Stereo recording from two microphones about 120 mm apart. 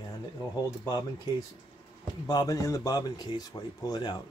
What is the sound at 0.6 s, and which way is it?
Speech, 30° left (ahead or behind).